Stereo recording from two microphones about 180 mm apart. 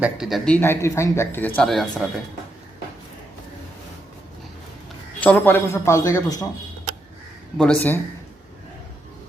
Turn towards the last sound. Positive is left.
turn(degrees=5)  # may be behind; listen again after turning